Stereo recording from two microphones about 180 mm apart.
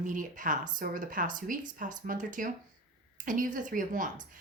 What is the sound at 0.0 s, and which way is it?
Speech, 45° right (ahead or behind).